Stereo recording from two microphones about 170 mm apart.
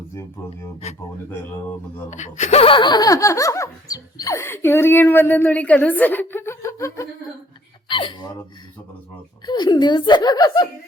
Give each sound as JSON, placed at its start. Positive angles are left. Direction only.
{"t": 0.8, "sound": "speech", "side_deg": 40}
{"t": 2.0, "sound": "speech", "side_deg": 45}
{"t": 7.9, "sound": "hiccup", "side_deg": 30}
{"t": 9.5, "sound": "speech", "side_deg": 25}